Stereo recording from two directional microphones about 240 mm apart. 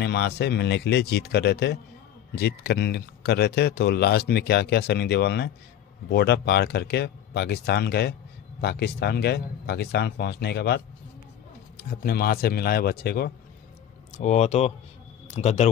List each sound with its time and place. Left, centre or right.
0.0 s speech: left
14.1 s speech: left